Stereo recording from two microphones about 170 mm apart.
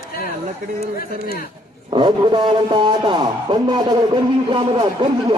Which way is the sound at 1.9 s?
25° right (ahead or behind).